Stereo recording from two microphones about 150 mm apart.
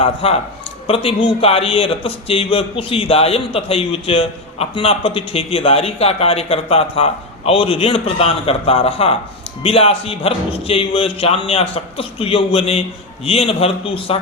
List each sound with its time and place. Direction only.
0.0 s a man's voice: 40° left (ahead or behind)